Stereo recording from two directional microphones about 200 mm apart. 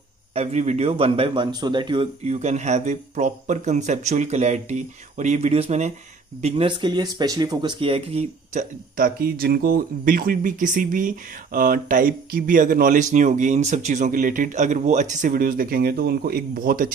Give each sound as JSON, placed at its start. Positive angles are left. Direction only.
{"t": 0.3, "sound": "speech", "side_deg": -30}